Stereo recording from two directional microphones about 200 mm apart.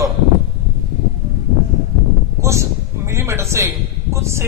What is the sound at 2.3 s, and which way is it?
A man's voice, 15° right (ahead or behind).